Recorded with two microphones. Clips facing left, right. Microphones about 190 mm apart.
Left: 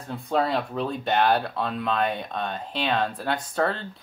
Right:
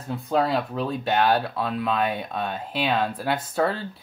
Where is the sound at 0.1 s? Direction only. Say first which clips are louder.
Right 2 dB; centre (ahead or behind).